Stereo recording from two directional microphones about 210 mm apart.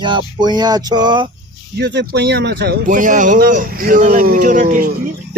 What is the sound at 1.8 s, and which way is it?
Speech, 55° right (ahead or behind).